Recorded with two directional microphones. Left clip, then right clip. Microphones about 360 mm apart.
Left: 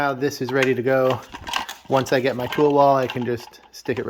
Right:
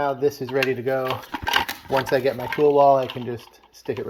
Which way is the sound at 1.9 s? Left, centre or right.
Left.